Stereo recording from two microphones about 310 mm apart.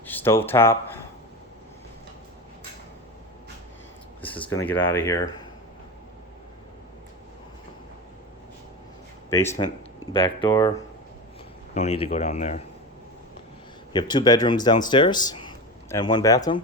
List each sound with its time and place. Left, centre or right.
0.0 s speech: centre
4.2 s a sound: centre
4.6 s speech: centre
9.3 s speech: centre
13.9 s speech: centre